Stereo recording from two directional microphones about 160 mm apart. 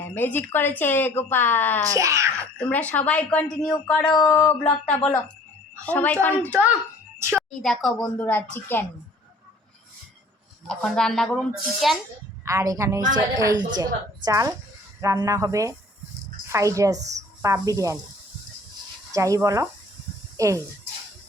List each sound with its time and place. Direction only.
0.0 s a woman's voice: 10° left (ahead or behind)
1.9 s speech: 20° right (ahead or behind)
2.6 s a woman's voice: 10° left (ahead or behind)
4.0 s speech: 25° left (ahead or behind)
4.3 s a woman's voice: 10° left (ahead or behind)
8.2 s a woman's voice: 10° left (ahead or behind)
10.7 s speech: 5° left (ahead or behind)
12.5 s speech: 20° right (ahead or behind)
19.1 s speech: 20° right (ahead or behind)
20.3 s a sound: 20° right (ahead or behind)